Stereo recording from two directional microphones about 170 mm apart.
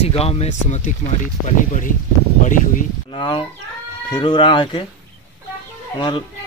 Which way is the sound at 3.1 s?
30° left (ahead or behind).